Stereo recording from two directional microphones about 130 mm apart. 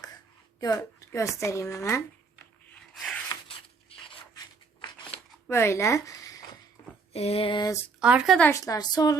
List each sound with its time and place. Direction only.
0.6 s a woman's voice: 25° left (ahead or behind)
2.7 s rub: 5° left (ahead or behind)
5.5 s speech: 20° left (ahead or behind)
7.1 s a sound: 50° left (ahead or behind)
7.9 s speech: 5° right (ahead or behind)
8.4 s a woman's voice: 20° left (ahead or behind)